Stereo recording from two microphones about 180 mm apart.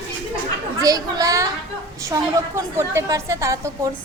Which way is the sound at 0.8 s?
20° right (ahead or behind).